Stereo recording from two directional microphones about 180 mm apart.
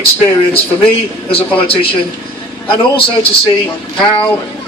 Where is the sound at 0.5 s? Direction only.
30° left (ahead or behind).